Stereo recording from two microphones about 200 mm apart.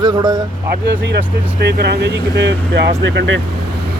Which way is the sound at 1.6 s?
55° right (ahead or behind).